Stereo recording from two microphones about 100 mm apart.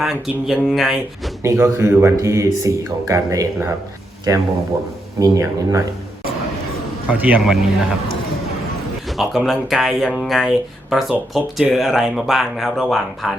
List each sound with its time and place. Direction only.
0.0 s speech: 5° right (ahead or behind)
1.5 s speech: 30° right (ahead or behind)
7.1 s a man's voice: 15° right (ahead or behind)
7.4 s speech: 5° right (ahead or behind)
9.1 s speech: centre (ahead or behind)